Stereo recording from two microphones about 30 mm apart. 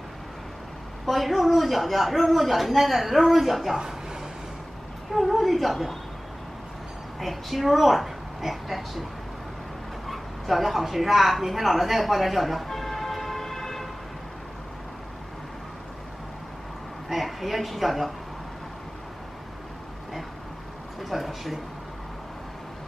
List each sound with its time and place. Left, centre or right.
1.0 s a woman's voice: centre
3.7 s a sound: right
5.1 s a woman's voice: centre
7.2 s a woman's voice: centre
10.0 s a woman's voice: centre
12.6 s vehicle: centre
17.1 s a woman's voice: centre
21.0 s speech: centre